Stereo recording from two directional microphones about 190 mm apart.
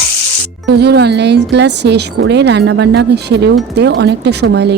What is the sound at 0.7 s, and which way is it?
Speech, 60° right (ahead or behind).